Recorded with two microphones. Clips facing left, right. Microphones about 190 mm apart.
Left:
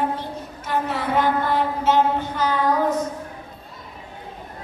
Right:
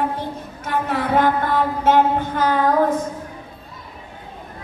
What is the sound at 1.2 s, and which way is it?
Mantra, 50° right (ahead or behind).